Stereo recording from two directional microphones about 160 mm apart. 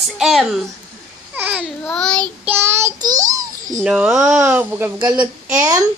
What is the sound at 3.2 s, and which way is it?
Babbling, 55° right (ahead or behind).